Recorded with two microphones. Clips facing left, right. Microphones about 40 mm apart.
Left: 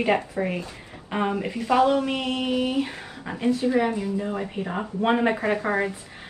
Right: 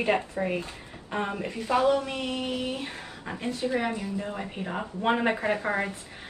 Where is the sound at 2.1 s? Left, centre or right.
Left.